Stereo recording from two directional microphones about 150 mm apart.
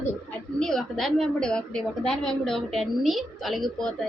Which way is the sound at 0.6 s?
5° left (ahead or behind).